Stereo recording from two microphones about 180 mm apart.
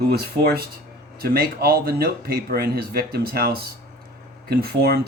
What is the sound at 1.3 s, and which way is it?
Speech, 55° right (ahead or behind).